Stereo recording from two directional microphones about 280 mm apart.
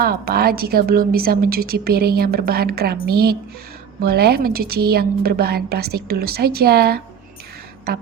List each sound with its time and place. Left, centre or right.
0.0 s a woman's voice: right